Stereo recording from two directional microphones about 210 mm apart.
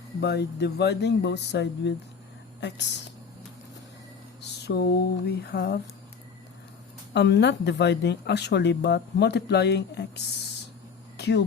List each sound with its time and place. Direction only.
0.2 s speech: 50° left (ahead or behind)
4.6 s a sound: 50° left (ahead or behind)
5.3 s speech: 50° left (ahead or behind)
7.1 s speech: 55° left (ahead or behind)